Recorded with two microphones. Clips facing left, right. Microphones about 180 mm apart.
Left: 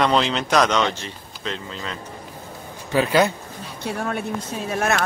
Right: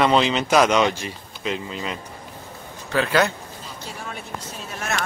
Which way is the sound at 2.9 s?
15° left (ahead or behind).